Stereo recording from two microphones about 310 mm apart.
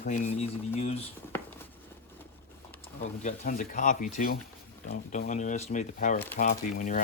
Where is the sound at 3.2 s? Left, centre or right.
Left.